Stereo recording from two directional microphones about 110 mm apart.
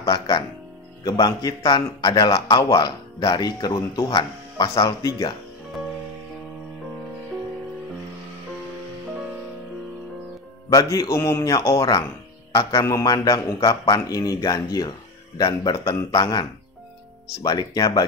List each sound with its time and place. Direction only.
1.0 s a man's voice: 35° left (ahead or behind)
1.6 s a man's voice: 50° left (ahead or behind)
10.7 s a man's voice: 30° left (ahead or behind)